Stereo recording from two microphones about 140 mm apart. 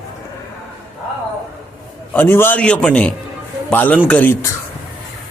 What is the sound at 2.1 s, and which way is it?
Speech, 15° left (ahead or behind).